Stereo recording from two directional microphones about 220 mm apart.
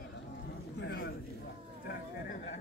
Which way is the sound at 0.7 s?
50° left (ahead or behind).